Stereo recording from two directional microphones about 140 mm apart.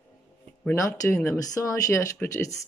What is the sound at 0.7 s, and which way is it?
Speech, 20° left (ahead or behind).